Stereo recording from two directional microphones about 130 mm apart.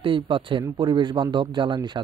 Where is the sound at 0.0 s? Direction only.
40° right (ahead or behind).